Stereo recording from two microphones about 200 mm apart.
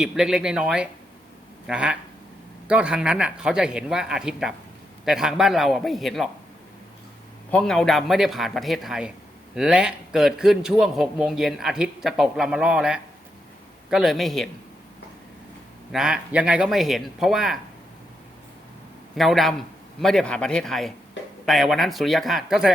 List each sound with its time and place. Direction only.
0.0 s a man's voice: 5° right (ahead or behind)
7.5 s a man's voice: centre (ahead or behind)
15.9 s a man's voice: 5° right (ahead or behind)
19.1 s a man's voice: centre (ahead or behind)